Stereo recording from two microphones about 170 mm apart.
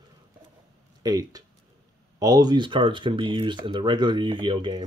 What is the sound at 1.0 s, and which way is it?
Speech, 20° right (ahead or behind).